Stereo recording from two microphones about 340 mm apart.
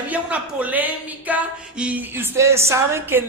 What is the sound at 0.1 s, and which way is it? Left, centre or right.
A woman's voice, centre.